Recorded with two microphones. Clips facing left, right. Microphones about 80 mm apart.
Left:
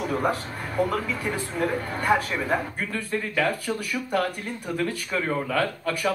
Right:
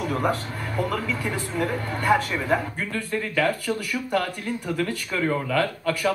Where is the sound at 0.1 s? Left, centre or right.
Centre.